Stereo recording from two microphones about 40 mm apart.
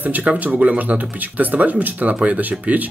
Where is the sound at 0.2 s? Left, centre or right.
Right.